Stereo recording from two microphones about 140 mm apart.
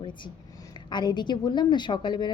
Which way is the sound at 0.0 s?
35° left (ahead or behind).